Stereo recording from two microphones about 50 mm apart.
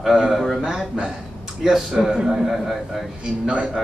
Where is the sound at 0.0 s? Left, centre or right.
Centre.